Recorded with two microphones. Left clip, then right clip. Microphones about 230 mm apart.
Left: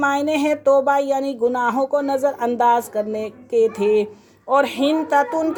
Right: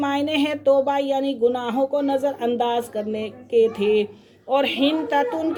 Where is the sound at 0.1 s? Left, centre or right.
Left.